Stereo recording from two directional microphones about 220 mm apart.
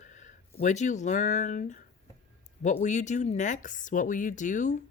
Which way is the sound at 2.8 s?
35° left (ahead or behind).